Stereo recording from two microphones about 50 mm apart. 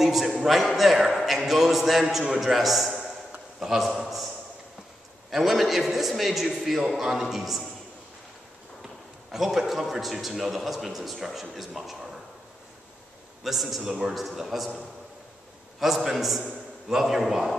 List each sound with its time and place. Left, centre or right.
0.0 s a man's voice: centre
2.0 s a man's voice: centre
5.3 s a man's voice: centre
8.8 s a man's voice: centre
13.4 s a man's voice: centre
15.8 s a man's voice: centre